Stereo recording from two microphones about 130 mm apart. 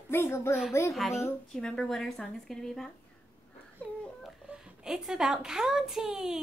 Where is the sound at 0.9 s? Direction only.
Centre (ahead or behind).